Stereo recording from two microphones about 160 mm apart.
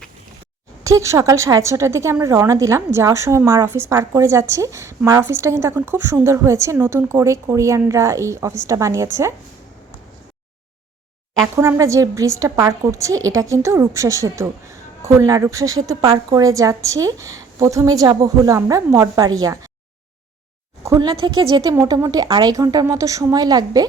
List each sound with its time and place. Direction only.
0.9 s a woman's voice: 20° right (ahead or behind)
11.5 s a woman's voice: 20° right (ahead or behind)
20.8 s a woman's voice: 25° right (ahead or behind)